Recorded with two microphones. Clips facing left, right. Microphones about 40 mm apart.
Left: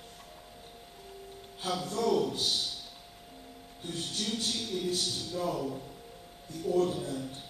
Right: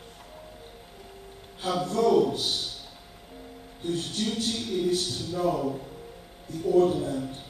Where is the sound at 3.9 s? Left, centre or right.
Centre.